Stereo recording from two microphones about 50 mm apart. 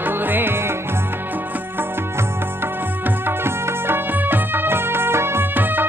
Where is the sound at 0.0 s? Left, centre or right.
Right.